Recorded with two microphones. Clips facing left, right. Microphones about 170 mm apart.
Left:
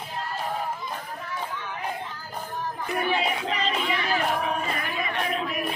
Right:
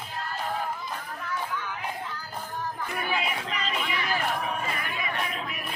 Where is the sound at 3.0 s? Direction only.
30° left (ahead or behind).